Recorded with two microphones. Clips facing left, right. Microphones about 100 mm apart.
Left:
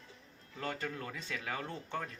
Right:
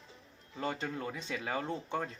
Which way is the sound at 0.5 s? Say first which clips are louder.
Right 3 dB; 20° right (ahead or behind).